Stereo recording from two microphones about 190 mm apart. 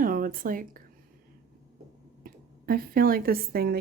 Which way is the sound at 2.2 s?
50° right (ahead or behind).